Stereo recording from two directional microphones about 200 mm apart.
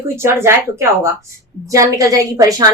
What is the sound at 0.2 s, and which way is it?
A woman's voice, 10° right (ahead or behind).